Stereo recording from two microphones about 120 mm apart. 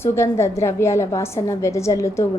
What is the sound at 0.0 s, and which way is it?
A woman's voice, 20° left (ahead or behind).